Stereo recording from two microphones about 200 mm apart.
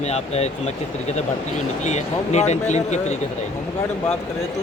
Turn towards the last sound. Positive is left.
turn(degrees=35)  # may be behind; listen again after turning